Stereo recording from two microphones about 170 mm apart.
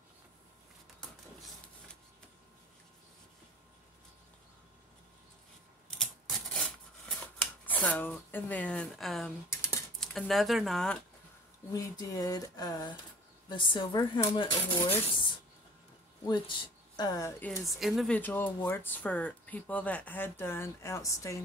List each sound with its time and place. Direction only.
5.9 s a sound: centre (ahead or behind)
7.6 s speech: 10° left (ahead or behind)
9.5 s computer keyboard: 15° left (ahead or behind)
9.9 s speech: centre (ahead or behind)
11.7 s speech: 20° left (ahead or behind)
16.3 s speech: 25° left (ahead or behind)
17.7 s speech: centre (ahead or behind)
18.1 s speech: 10° left (ahead or behind)